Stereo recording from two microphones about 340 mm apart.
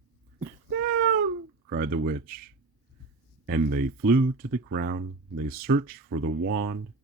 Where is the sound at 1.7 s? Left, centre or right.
Right.